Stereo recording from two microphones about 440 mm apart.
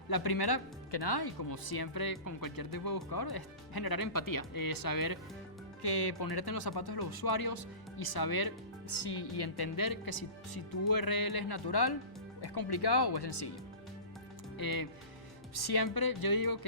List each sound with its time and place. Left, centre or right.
0.1 s speech: left
5.8 s speech: left
14.6 s speech: left